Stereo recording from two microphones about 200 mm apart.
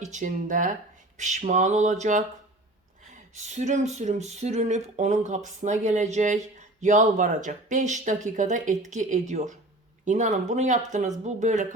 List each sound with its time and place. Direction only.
0.0 s speech: 40° right (ahead or behind)
3.3 s speech: 35° right (ahead or behind)